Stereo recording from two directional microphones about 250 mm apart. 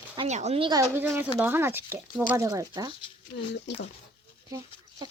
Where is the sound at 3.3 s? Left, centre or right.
Left.